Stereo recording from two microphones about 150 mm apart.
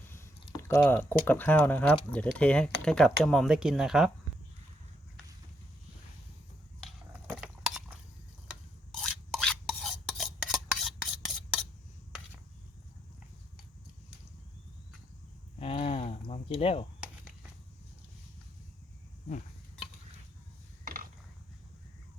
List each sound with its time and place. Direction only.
0.1 s speech: 15° left (ahead or behind); by 4.1 s centre (ahead or behind)
7.1 s cutlery: 10° right (ahead or behind)
9.0 s filing: 5° left (ahead or behind)
15.5 s a sound: 40° left (ahead or behind)
20.8 s mechanisms: 70° right (ahead or behind)